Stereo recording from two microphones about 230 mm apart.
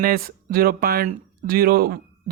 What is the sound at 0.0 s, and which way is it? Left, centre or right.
Speech, right.